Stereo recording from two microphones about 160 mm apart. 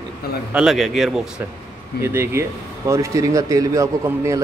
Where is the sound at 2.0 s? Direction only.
15° right (ahead or behind).